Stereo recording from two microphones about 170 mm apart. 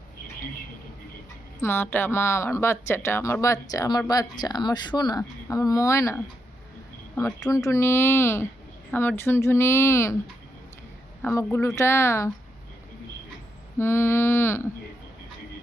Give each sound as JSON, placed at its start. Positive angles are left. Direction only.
{"t": 1.6, "sound": "speech", "side_deg": 15}
{"t": 11.2, "sound": "speech", "side_deg": 15}
{"t": 13.7, "sound": "speech", "side_deg": 15}